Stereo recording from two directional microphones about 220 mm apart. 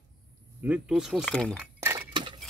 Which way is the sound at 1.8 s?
15° right (ahead or behind).